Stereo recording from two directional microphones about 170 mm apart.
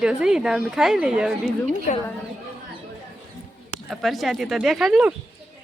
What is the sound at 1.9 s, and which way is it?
Speech, 55° left (ahead or behind).